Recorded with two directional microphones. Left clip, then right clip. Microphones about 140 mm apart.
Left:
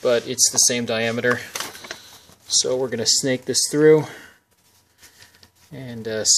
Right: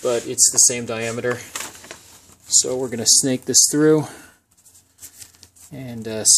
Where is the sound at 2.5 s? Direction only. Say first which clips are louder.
Even; 30° right (ahead or behind).